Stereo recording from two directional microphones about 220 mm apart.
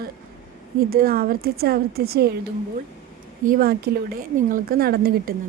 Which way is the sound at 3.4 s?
40° right (ahead or behind).